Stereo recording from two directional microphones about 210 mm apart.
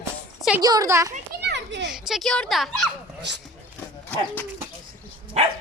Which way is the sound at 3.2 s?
55° right (ahead or behind).